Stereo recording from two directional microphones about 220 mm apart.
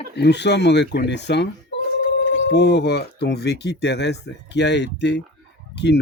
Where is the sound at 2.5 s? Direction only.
50° left (ahead or behind).